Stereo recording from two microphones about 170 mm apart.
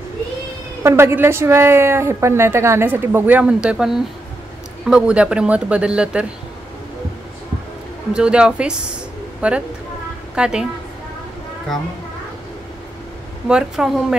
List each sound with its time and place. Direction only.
0.8 s a woman's voice: 15° right (ahead or behind)
8.1 s a woman's voice: 5° right (ahead or behind)
13.5 s speech: 5° right (ahead or behind)